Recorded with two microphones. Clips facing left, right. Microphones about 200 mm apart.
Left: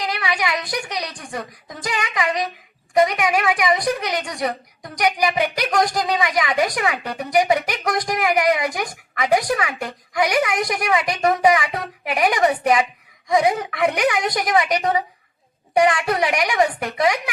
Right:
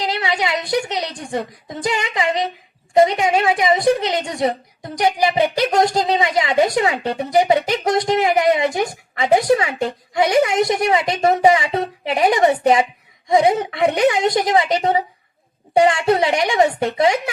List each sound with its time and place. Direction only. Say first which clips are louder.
0.0 s a woman's voice: right 3 dB; 25° right (ahead or behind)